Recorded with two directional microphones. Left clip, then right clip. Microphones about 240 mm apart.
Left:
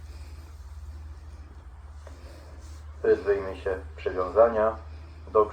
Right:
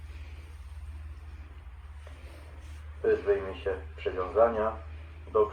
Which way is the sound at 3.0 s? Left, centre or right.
Right.